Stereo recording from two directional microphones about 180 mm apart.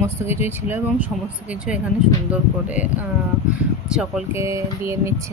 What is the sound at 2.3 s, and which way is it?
Speech, 10° right (ahead or behind).